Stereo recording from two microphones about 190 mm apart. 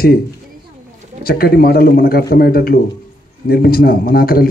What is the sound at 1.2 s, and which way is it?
A man's voice, 50° left (ahead or behind).